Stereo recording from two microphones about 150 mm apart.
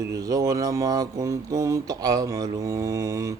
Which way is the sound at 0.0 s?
25° right (ahead or behind).